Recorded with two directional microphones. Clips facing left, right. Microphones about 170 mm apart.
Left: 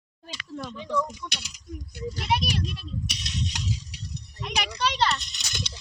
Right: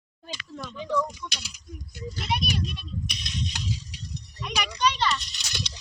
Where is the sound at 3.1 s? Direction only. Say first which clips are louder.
Left 1 dB; 75° left (ahead or behind).